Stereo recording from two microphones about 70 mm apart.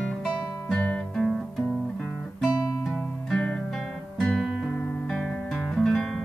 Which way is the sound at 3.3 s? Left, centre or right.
Centre.